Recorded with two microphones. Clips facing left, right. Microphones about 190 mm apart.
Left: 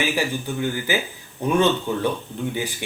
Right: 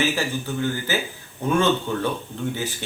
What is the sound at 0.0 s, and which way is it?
Speech, 15° left (ahead or behind).